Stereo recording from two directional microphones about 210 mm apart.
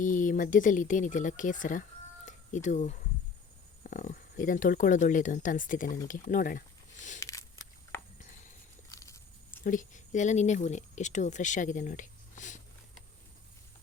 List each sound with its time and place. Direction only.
0.0 s speech: 40° left (ahead or behind)
2.2 s a sound: 35° left (ahead or behind)
3.8 s speech: 40° left (ahead or behind)
7.2 s a sound: 15° left (ahead or behind)
8.9 s walk: 15° left (ahead or behind)
9.6 s speech: 35° left (ahead or behind)